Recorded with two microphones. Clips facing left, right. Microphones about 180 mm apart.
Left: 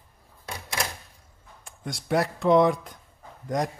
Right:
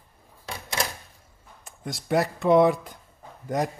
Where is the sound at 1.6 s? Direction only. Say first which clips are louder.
Right 1 dB; centre (ahead or behind).